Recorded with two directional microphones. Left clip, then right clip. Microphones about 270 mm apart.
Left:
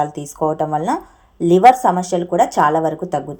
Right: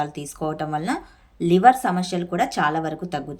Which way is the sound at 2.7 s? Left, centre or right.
Centre.